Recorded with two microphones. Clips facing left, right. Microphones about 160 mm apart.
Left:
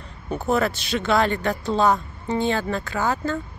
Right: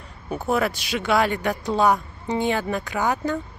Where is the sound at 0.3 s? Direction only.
10° right (ahead or behind).